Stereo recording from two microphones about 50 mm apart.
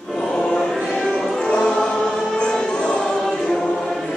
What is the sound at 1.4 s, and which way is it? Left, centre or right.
Choir, centre.